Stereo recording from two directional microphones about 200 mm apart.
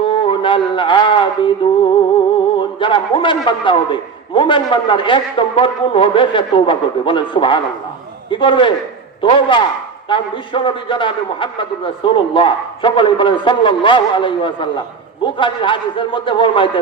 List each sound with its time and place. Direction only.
0.0 s speech: 25° left (ahead or behind)
2.6 s a man's voice: 25° left (ahead or behind)